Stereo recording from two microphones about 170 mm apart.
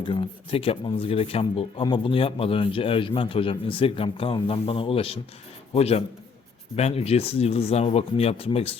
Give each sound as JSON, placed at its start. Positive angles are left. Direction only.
{"t": 0.1, "sound": "speech", "side_deg": 30}